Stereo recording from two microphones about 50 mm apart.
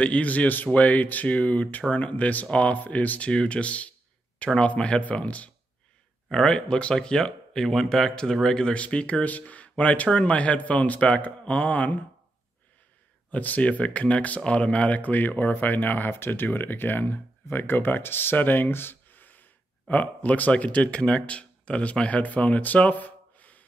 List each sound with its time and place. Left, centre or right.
0.0 s speech: left
13.3 s speech: left